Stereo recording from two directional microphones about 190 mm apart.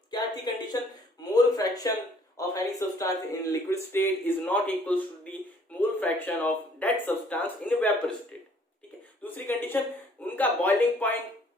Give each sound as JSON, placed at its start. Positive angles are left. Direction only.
{"t": 0.1, "sound": "speech", "side_deg": 20}
{"t": 9.2, "sound": "speech", "side_deg": 10}